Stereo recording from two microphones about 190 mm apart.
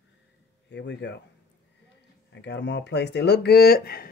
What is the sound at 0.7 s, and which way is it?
Speech, 65° left (ahead or behind).